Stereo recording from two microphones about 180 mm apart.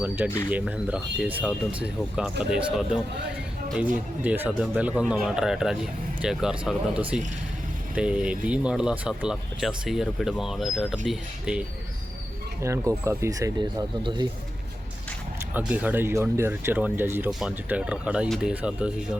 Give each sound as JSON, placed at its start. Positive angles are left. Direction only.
{"t": 0.2, "sound": "speech", "side_deg": -10}
{"t": 4.2, "sound": "speech", "side_deg": -10}
{"t": 12.6, "sound": "speech", "side_deg": -15}
{"t": 15.5, "sound": "speech", "side_deg": -10}